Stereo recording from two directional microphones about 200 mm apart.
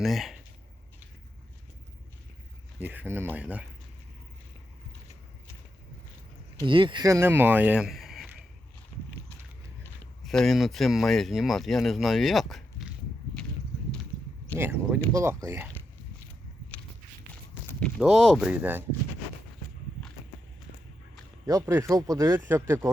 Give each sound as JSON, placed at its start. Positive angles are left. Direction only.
{"t": 0.0, "sound": "speech", "side_deg": 0}
{"t": 2.7, "sound": "speech", "side_deg": -10}
{"t": 6.7, "sound": "speech", "side_deg": -25}
{"t": 9.8, "sound": "speech", "side_deg": 0}
{"t": 14.6, "sound": "speech", "side_deg": -10}
{"t": 17.7, "sound": "a sound", "side_deg": 5}
{"t": 17.9, "sound": "speech", "side_deg": 0}
{"t": 21.4, "sound": "speech", "side_deg": -15}